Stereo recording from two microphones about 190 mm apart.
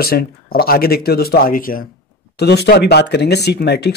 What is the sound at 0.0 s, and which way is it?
Speech, 55° left (ahead or behind).